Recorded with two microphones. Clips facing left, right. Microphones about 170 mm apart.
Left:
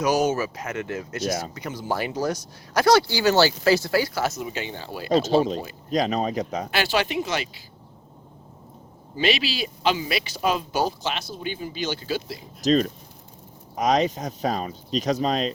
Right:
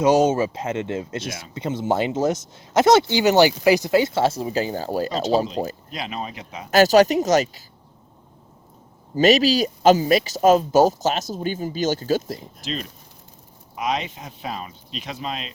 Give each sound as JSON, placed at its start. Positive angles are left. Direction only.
{"t": 0.0, "sound": "speech", "side_deg": -25}
{"t": 5.9, "sound": "speech", "side_deg": 40}
{"t": 6.7, "sound": "speech", "side_deg": -40}
{"t": 9.1, "sound": "speech", "side_deg": -40}
{"t": 12.6, "sound": "speech", "side_deg": 40}